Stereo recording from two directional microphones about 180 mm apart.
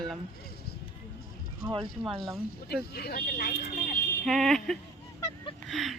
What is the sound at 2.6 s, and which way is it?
Speech, 60° left (ahead or behind).